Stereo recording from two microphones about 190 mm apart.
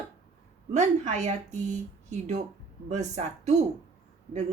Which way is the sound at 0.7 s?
40° right (ahead or behind).